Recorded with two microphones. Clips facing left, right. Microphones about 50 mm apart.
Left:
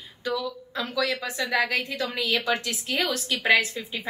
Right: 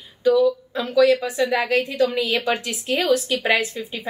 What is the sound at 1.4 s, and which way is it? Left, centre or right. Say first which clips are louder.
Speech: right 1 dB; centre.